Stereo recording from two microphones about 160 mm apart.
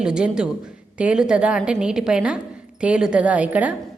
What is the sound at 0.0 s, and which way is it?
A woman's voice, 5° right (ahead or behind).